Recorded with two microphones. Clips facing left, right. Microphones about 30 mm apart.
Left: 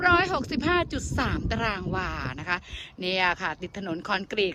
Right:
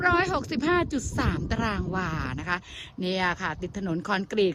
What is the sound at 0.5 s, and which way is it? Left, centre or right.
Speech, left.